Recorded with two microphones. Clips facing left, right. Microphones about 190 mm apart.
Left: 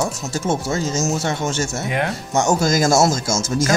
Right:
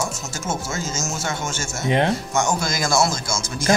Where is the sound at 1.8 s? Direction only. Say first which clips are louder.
Right 7 dB; 25° right (ahead or behind).